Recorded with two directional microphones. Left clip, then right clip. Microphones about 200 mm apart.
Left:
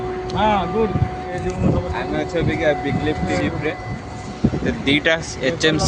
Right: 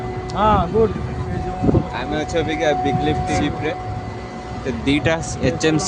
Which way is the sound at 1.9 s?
15° right (ahead or behind).